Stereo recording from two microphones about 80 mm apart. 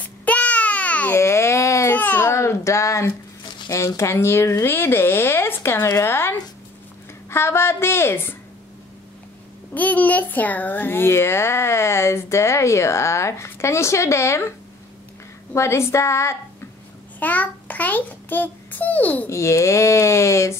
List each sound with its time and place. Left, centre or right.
0.0 s babbling: centre
1.1 s baby cry: left
2.0 s baby cry: left
2.3 s speech: left
3.4 s a sound: left
3.7 s speech: left
9.8 s speech: left
15.5 s speech: left
17.2 s a child's voice: left
19.2 s speech: left